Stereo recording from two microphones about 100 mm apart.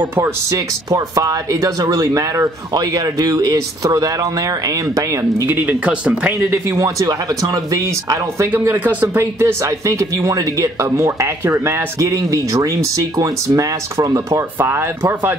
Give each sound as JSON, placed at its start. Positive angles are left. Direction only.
{"t": 0.0, "sound": "speech", "side_deg": -25}
{"t": 6.3, "sound": "speech", "side_deg": -30}
{"t": 8.5, "sound": "speech", "side_deg": -20}